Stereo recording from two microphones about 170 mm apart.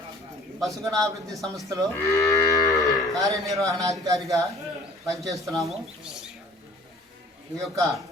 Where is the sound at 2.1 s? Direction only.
20° left (ahead or behind).